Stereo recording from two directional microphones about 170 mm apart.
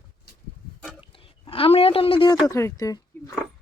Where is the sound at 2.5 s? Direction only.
15° left (ahead or behind).